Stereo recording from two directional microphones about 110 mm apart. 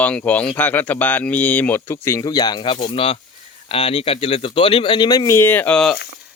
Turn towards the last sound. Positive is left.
turn(degrees=5)  # may be behind; listen again after turning